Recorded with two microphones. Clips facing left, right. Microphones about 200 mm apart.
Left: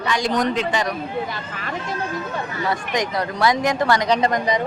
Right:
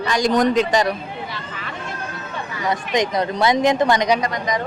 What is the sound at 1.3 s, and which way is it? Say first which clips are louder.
Speech: left 2 dB; 45° left (ahead or behind).